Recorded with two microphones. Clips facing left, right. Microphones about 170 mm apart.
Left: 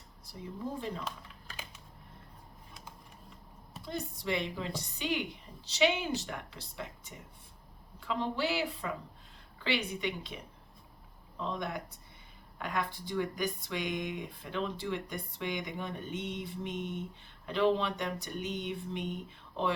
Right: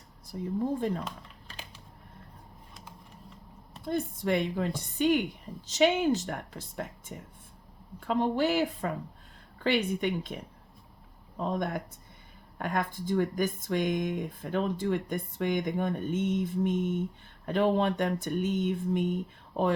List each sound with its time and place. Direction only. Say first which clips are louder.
0.3 s speech: right 9 dB; 50° right (ahead or behind)
3.8 s speech: right 7 dB; 50° right (ahead or behind)